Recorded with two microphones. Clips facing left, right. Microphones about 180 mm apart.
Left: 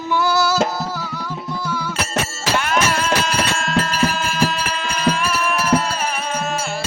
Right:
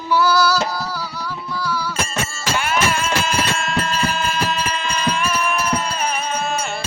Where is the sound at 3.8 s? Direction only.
90° left.